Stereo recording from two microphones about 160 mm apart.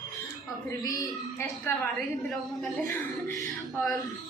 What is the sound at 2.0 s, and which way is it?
Speech, centre (ahead or behind).